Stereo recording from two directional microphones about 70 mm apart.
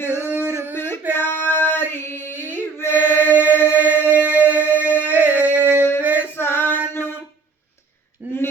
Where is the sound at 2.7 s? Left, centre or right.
Left.